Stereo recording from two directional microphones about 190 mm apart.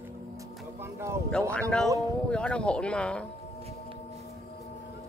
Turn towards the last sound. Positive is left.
turn(degrees=5)  # may be behind; listen again after turning